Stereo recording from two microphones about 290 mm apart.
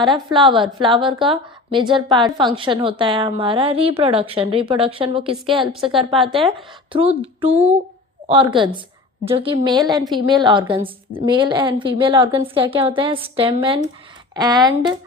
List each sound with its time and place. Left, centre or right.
0.0 s a woman's voice: centre
6.9 s a sound: centre
8.3 s a woman's voice: centre